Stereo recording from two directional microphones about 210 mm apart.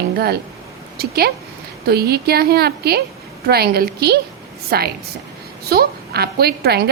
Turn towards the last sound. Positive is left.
turn(degrees=-50)  # may be behind; listen again after turning